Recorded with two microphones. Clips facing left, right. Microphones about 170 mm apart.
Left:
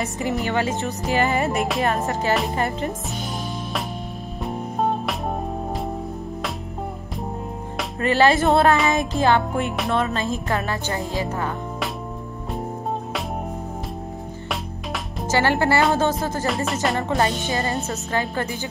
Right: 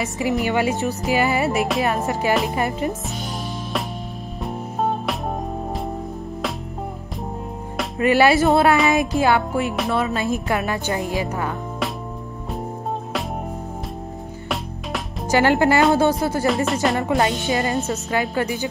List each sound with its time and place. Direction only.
0.0 s music: centre (ahead or behind)
0.5 s music: 10° right (ahead or behind)
4.4 s music: centre (ahead or behind)
8.0 s music: 10° right (ahead or behind)
15.2 s music: 15° right (ahead or behind)
16.4 s music: centre (ahead or behind)
17.5 s music: 15° right (ahead or behind)